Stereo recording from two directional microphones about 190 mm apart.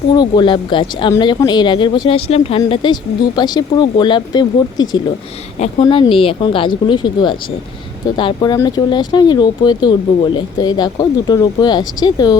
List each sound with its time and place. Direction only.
0.1 s speech: 25° left (ahead or behind)
5.5 s speech: 30° left (ahead or behind)